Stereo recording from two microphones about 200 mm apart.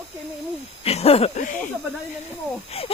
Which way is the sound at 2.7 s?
30° left (ahead or behind).